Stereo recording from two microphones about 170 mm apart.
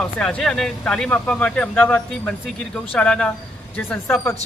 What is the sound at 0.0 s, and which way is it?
Speech, 5° left (ahead or behind).